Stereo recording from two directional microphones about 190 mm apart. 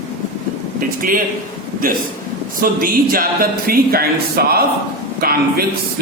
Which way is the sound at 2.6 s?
45° right (ahead or behind).